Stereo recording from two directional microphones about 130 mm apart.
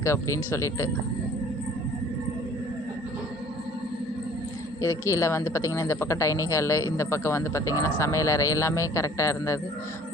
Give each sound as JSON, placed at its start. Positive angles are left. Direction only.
{"t": 0.0, "sound": "a woman's voice", "side_deg": 20}
{"t": 4.8, "sound": "a woman's voice", "side_deg": 25}